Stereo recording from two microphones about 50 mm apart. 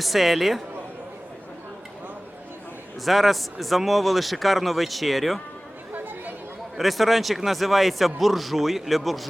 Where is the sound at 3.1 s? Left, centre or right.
Centre.